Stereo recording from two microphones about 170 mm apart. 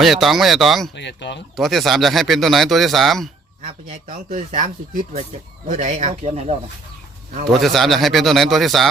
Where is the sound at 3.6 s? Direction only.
45° right (ahead or behind).